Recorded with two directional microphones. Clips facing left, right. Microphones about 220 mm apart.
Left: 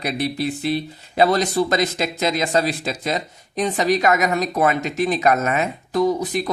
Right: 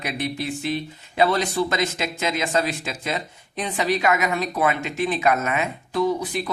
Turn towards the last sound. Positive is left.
turn(degrees=40)  # may be behind; listen again after turning